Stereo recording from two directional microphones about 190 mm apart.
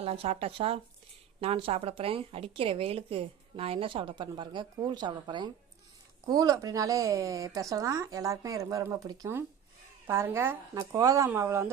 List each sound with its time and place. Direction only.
0.0 s a woman's voice: 30° right (ahead or behind); by 11.7 s 15° right (ahead or behind)